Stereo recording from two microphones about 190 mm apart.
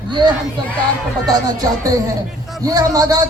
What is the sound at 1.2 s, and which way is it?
Speech, 20° right (ahead or behind).